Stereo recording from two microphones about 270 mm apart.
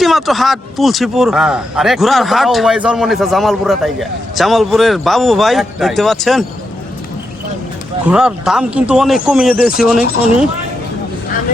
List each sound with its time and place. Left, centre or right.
0.0 s a man's voice: centre
8.0 s a man's voice: centre